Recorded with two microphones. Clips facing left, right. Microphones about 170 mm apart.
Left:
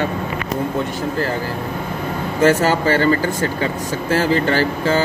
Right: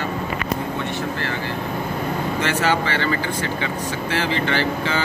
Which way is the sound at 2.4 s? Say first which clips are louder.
Left 8 dB; 40° left (ahead or behind).